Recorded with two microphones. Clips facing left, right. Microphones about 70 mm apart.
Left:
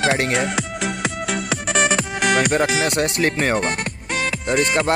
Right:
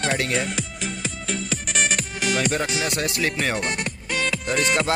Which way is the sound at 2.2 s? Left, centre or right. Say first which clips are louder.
Left 5 dB; left.